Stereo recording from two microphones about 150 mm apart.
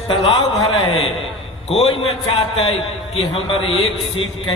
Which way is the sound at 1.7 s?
40° left (ahead or behind).